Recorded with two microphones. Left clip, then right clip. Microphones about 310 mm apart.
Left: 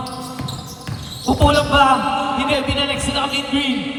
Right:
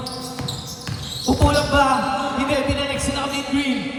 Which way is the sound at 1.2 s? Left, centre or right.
Centre.